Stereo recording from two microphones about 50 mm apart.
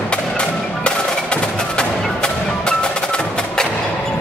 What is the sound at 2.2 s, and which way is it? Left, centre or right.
Wood block, centre.